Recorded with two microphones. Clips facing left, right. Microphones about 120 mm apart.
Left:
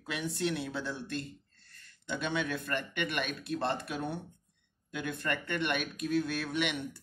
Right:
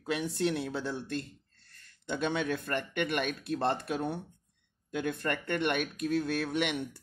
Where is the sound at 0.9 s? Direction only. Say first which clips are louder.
Right 2 dB; 45° right (ahead or behind).